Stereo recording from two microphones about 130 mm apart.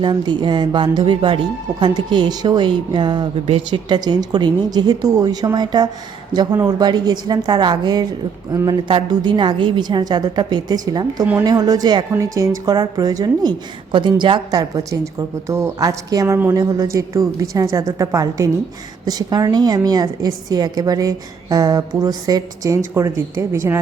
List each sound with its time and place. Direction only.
0.0 s a woman's voice: 35° right (ahead or behind); by 23.8 s 20° right (ahead or behind)